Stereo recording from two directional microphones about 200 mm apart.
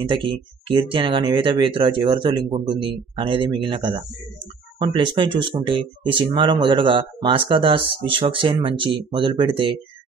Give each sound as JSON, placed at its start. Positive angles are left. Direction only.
{"t": 0.1, "sound": "speech", "side_deg": -25}